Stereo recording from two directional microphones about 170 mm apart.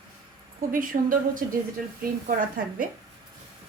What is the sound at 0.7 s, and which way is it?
Speech, 55° right (ahead or behind).